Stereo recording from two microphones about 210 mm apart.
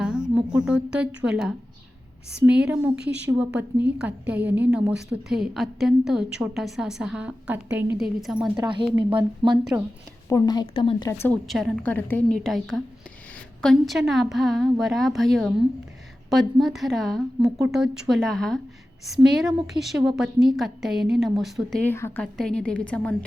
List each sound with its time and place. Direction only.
0.0 s a woman's voice: 5° right (ahead or behind)
9.1 s speech: 25° right (ahead or behind)
10.2 s a woman's voice: 15° left (ahead or behind)
11.2 s a woman's voice: 5° left (ahead or behind)